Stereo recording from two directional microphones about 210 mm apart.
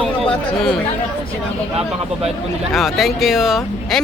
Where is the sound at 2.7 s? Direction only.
Centre (ahead or behind).